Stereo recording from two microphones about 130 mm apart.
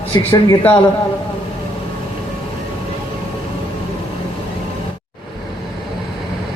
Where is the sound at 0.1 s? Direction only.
20° left (ahead or behind).